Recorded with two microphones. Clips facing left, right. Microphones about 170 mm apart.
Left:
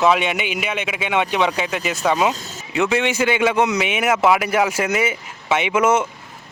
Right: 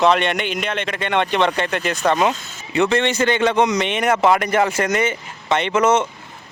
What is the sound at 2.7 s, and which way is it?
A man's voice, 5° left (ahead or behind).